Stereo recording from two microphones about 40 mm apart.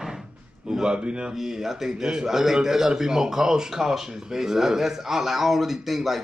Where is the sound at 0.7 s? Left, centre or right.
Centre.